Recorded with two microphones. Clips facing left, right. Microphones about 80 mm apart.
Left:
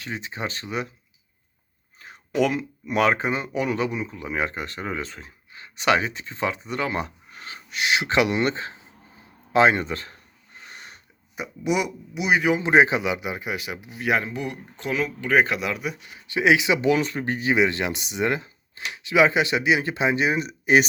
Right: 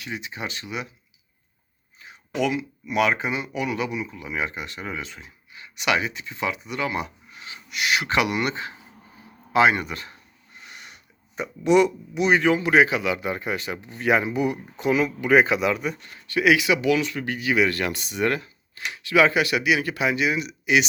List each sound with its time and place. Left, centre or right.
0.0 s speech: left
2.0 s speech: left
10.7 s a sound: left
11.3 s speech: centre
12.5 s speech: left